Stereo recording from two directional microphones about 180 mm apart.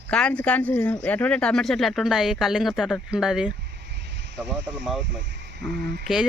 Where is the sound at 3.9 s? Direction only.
70° right (ahead or behind).